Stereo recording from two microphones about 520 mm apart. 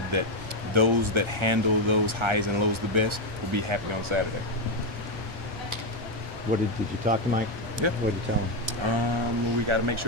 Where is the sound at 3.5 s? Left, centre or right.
Right.